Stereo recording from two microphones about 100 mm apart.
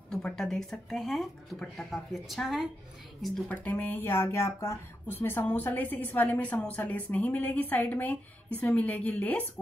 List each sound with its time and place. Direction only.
0.1 s speech: 5° left (ahead or behind)
3.4 s speech: 15° left (ahead or behind)